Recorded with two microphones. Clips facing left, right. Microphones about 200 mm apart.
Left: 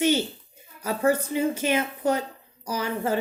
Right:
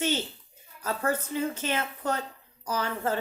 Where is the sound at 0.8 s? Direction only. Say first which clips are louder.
Left 6 dB; 10° left (ahead or behind).